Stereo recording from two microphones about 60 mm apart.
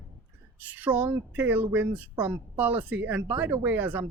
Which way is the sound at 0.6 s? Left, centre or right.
Right.